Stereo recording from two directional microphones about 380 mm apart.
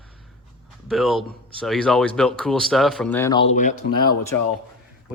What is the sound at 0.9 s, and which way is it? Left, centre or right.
Speech, centre.